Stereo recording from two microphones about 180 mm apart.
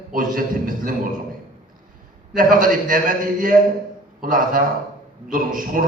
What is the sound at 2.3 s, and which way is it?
A man's voice, 50° right (ahead or behind).